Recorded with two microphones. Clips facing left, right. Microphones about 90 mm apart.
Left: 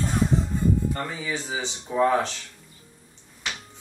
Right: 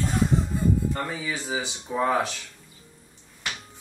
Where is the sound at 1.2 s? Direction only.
5° right (ahead or behind).